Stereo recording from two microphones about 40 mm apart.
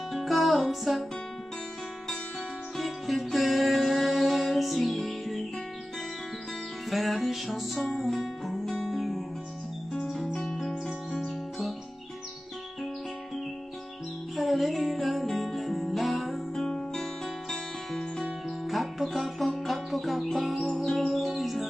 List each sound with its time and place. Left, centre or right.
0.1 s music: centre
2.8 s music: centre
6.9 s music: centre
10.1 s music: left
10.4 s music: centre
14.3 s music: centre
16.6 s music: centre